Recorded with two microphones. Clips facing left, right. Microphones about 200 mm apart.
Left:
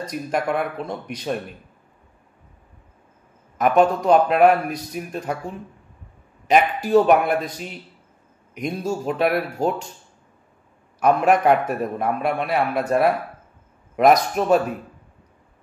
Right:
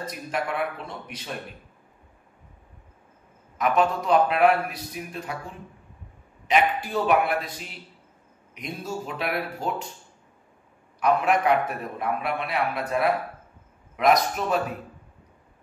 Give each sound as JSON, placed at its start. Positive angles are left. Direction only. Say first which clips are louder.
{"t": 0.3, "sound": "a man's voice", "louder": "left 5 dB", "side_deg": 40}
{"t": 3.5, "sound": "a man's voice", "louder": "left 6 dB", "side_deg": 45}
{"t": 6.4, "sound": "a man's voice", "louder": "left 4 dB", "side_deg": 40}
{"t": 8.5, "sound": "a man's voice", "louder": "left 7 dB", "side_deg": 45}
{"t": 11.0, "sound": "a man's voice", "louder": "left 5 dB", "side_deg": 45}